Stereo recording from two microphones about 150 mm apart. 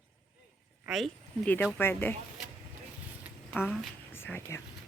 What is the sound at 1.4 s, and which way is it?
Speech, 10° left (ahead or behind).